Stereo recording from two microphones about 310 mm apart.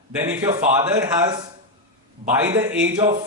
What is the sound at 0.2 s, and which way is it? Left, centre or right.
Speech, centre.